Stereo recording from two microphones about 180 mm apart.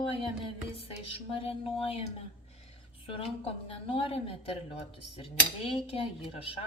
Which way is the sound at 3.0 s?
30° left (ahead or behind).